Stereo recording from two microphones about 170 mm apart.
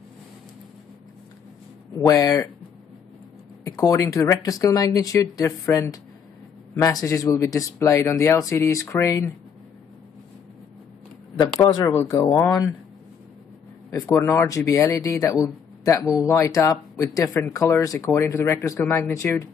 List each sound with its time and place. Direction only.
2.0 s speech: 20° left (ahead or behind)
3.6 s speech: 20° left (ahead or behind)
11.9 s speech: 20° left (ahead or behind)
13.8 s speech: 20° left (ahead or behind)